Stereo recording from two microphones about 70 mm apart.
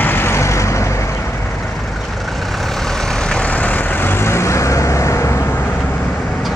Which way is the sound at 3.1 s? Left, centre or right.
Centre.